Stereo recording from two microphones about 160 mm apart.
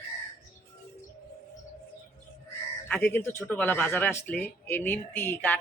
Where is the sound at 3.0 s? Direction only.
15° left (ahead or behind).